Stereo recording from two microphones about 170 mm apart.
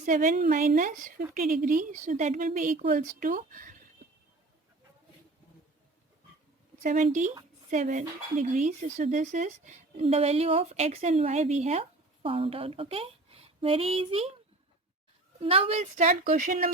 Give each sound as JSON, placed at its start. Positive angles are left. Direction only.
{"t": 0.0, "sound": "a woman's voice", "side_deg": -50}
{"t": 6.8, "sound": "a woman's voice", "side_deg": -45}
{"t": 15.4, "sound": "a woman's voice", "side_deg": -35}